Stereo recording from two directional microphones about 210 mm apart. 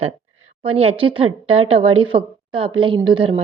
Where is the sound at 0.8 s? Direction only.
30° right (ahead or behind).